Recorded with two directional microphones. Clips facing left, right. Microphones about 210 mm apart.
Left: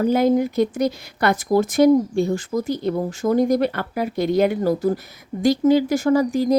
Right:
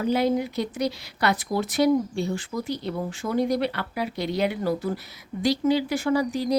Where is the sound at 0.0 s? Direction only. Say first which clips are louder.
Left 6 dB; 50° left (ahead or behind).